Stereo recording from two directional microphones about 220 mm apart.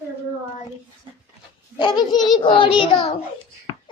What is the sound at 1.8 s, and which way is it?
A child's voice, 20° left (ahead or behind).